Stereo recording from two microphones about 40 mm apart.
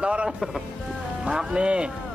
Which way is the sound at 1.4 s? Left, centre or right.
Right.